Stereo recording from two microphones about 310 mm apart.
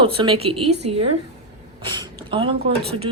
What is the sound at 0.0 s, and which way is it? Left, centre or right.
A woman's voice, centre.